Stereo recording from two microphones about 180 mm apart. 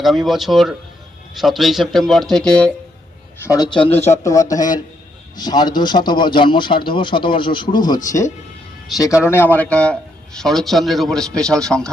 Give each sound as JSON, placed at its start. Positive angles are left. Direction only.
{"t": 0.0, "sound": "a man's voice", "side_deg": 0}
{"t": 3.4, "sound": "a man's voice", "side_deg": 20}
{"t": 9.2, "sound": "a man's voice", "side_deg": 10}